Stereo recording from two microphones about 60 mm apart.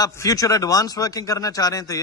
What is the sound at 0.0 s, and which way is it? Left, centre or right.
Speech, left.